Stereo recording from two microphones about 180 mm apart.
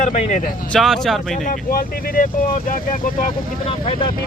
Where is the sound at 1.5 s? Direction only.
50° left (ahead or behind).